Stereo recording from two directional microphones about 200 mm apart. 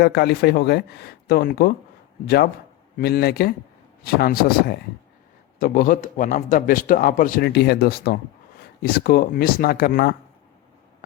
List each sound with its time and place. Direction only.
0.0 s a man's voice: 55° left (ahead or behind)